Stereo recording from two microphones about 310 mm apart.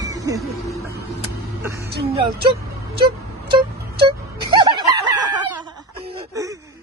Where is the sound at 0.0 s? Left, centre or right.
Centre.